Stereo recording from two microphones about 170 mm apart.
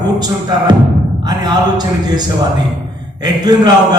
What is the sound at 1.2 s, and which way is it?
A man's voice, 25° right (ahead or behind).